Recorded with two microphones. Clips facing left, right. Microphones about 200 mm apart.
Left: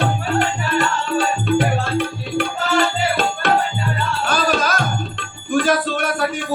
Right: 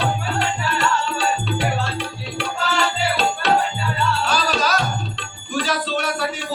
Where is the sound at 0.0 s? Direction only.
50° left (ahead or behind).